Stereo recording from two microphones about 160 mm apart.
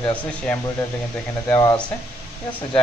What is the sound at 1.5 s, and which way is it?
Speech, 25° left (ahead or behind).